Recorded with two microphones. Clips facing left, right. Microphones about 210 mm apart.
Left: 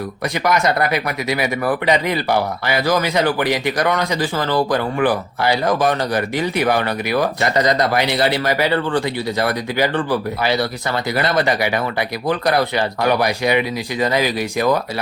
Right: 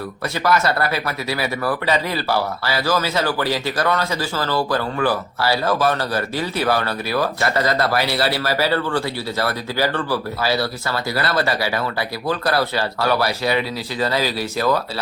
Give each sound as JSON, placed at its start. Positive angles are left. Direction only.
{"t": 0.4, "sound": "speech", "side_deg": 15}